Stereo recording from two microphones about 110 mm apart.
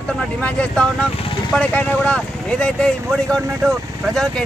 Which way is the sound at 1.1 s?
55° left (ahead or behind).